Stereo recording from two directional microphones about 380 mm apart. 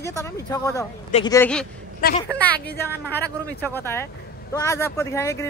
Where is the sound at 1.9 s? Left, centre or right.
Left.